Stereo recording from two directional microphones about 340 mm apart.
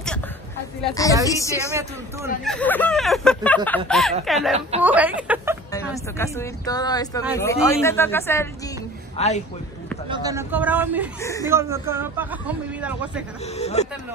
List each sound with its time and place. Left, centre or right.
0.8 s a man's voice: centre
4.6 s a woman's voice: centre
4.8 s speech: centre
5.7 s speech: centre
9.1 s a man's voice: centre
10.0 s a man's voice: centre
13.6 s speech: centre